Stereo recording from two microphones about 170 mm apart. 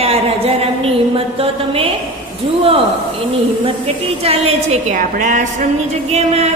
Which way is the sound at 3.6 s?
35° right (ahead or behind).